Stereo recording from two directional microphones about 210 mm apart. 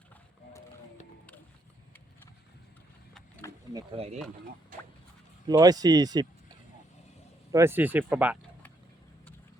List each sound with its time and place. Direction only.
3.7 s speech: 20° right (ahead or behind)
5.5 s speech: 20° right (ahead or behind)
7.5 s speech: 10° right (ahead or behind)